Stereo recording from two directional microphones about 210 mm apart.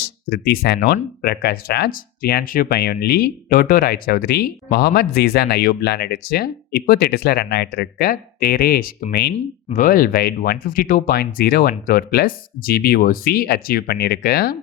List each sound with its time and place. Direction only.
0.0 s speech: 45° left (ahead or behind)